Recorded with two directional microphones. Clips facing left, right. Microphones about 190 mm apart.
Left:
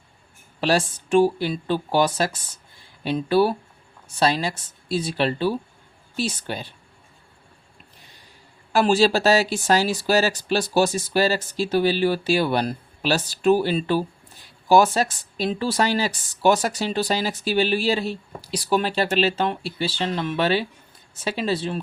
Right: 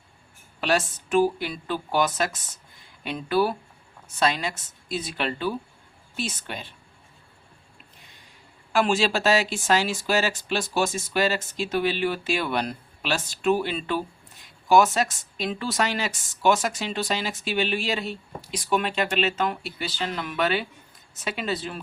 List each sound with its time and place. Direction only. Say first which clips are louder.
0.6 s speech: left 3 dB; 30° left (ahead or behind)
8.7 s speech: left 4 dB; 35° left (ahead or behind)